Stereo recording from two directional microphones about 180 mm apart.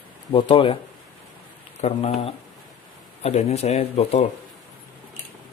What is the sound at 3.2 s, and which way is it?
Speech, 35° left (ahead or behind).